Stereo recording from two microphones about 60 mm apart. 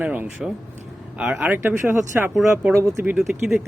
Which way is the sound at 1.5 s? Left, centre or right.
Right.